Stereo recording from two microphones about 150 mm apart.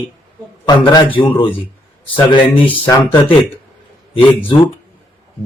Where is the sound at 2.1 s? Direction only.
35° left (ahead or behind).